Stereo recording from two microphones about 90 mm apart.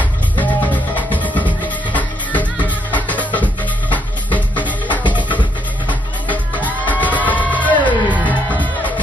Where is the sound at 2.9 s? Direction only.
20° left (ahead or behind).